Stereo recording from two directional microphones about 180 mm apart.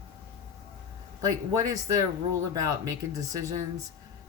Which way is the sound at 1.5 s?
20° right (ahead or behind).